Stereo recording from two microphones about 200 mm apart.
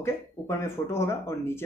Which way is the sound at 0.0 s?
15° left (ahead or behind).